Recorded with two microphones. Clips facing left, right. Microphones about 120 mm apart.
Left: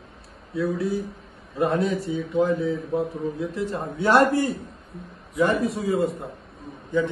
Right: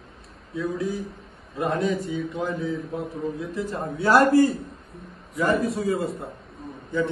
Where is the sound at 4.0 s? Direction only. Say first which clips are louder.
Even; 25° left (ahead or behind).